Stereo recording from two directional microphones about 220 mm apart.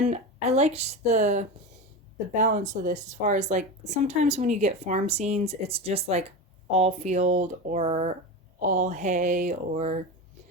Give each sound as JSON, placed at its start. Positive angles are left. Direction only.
{"t": 0.0, "sound": "speech", "side_deg": -30}